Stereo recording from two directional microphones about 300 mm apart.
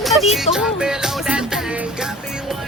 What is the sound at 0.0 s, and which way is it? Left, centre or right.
Music, centre.